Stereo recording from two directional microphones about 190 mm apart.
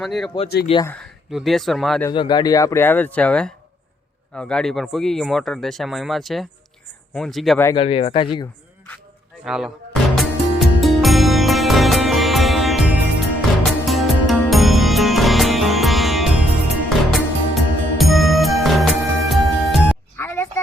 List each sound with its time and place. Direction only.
0.0 s speech: centre (ahead or behind)
0.7 s speech: 30° left (ahead or behind)
1.3 s speech: centre (ahead or behind)
2.0 s speech: 25° left (ahead or behind); by 7.6 s centre (ahead or behind)
7.8 s speech: 30° left (ahead or behind)
9.4 s music: centre (ahead or behind)
20.1 s music: 10° left (ahead or behind)